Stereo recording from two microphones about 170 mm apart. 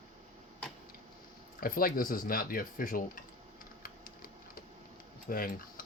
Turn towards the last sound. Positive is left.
turn(degrees=55)  # may be behind; listen again after turning